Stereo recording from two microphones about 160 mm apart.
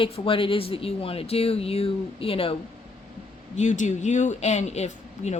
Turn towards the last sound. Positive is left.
turn(degrees=45)  # may be behind; listen again after turning